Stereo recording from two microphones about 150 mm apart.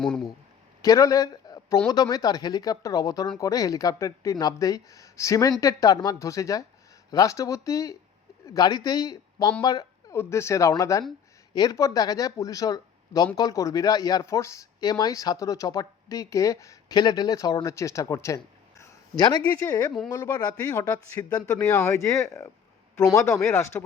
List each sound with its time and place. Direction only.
0.0 s speech: centre (ahead or behind)
0.8 s speech: 20° left (ahead or behind)
18.8 s a sound: 25° left (ahead or behind)
19.5 s speech: 15° left (ahead or behind)